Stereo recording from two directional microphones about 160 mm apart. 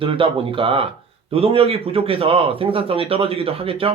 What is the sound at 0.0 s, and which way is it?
Speech, 35° right (ahead or behind).